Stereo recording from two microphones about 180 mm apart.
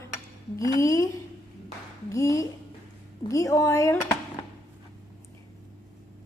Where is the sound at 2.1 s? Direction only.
15° left (ahead or behind).